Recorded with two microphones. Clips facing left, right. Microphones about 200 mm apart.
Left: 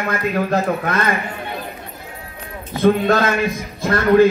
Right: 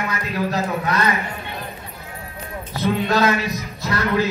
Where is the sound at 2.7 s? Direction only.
50° left (ahead or behind).